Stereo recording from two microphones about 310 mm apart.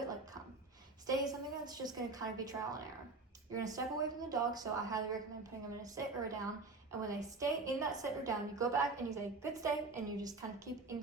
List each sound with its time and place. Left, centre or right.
1.0 s a woman's voice: centre